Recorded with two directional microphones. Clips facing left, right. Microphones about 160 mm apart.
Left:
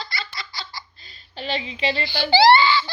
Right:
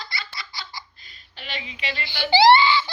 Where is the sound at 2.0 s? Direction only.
20° right (ahead or behind).